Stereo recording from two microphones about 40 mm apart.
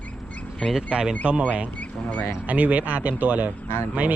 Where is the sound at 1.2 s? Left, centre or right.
Right.